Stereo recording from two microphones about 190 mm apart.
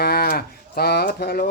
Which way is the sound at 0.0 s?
55° left (ahead or behind).